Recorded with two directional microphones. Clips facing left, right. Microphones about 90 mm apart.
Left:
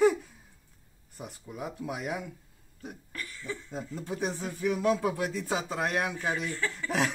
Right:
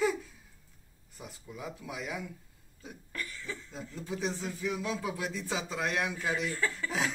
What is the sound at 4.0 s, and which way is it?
Speech, 50° left (ahead or behind).